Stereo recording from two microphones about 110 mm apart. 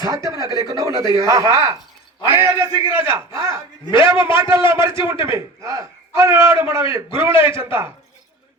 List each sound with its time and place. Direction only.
0.0 s a man's voice: 30° right (ahead or behind)
4.1 s a man's voice: 45° left (ahead or behind)
4.4 s a man's voice: 25° right (ahead or behind)